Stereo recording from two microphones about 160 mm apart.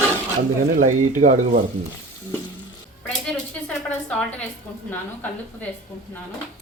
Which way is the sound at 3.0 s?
5° left (ahead or behind).